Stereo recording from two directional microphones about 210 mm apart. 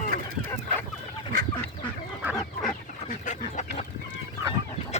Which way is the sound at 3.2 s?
35° left (ahead or behind).